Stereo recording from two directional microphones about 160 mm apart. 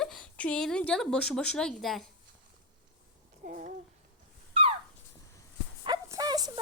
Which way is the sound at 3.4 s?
55° right (ahead or behind).